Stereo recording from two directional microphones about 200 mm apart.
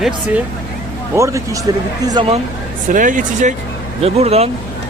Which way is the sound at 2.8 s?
40° right (ahead or behind).